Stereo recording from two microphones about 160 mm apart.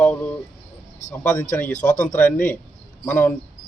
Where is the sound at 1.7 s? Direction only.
55° left (ahead or behind).